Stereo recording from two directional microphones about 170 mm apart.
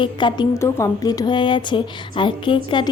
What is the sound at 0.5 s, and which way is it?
Speech, 15° left (ahead or behind).